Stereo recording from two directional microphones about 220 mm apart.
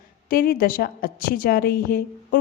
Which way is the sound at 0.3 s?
40° left (ahead or behind).